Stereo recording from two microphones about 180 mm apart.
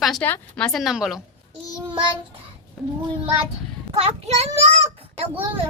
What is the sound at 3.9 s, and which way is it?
A child's voice, 35° right (ahead or behind).